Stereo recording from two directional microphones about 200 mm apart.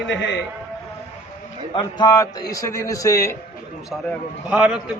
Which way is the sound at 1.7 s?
20° left (ahead or behind).